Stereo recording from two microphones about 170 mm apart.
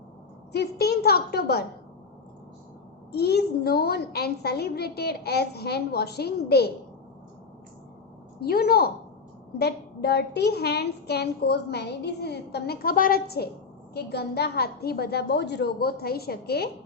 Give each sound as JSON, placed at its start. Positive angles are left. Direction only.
{"t": 0.5, "sound": "a woman's voice", "side_deg": 70}
{"t": 3.1, "sound": "a woman's voice", "side_deg": 70}
{"t": 8.4, "sound": "a woman's voice", "side_deg": 65}